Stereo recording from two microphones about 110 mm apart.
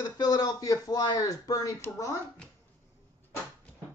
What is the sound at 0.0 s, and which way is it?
Speech, 35° left (ahead or behind).